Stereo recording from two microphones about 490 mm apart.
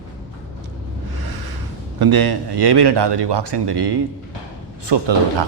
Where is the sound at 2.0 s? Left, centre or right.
Right.